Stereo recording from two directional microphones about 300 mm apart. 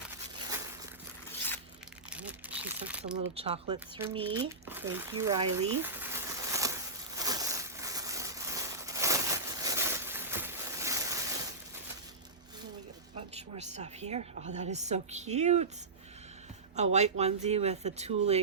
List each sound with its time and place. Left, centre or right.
0.3 s a sound: centre
1.3 s biting: centre
2.0 s crumpling: centre
3.3 s speech: centre
4.7 s a sound: centre
13.3 s speech: right
16.7 s speech: right